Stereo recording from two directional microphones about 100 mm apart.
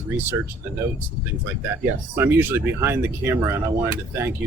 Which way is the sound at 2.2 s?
25° right (ahead or behind).